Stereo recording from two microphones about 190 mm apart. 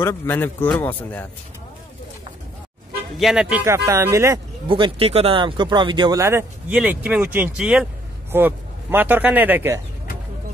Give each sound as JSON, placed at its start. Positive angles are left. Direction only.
{"t": 0.0, "sound": "a man's voice", "side_deg": 15}
{"t": 3.2, "sound": "speech", "side_deg": 0}
{"t": 4.6, "sound": "speech", "side_deg": -25}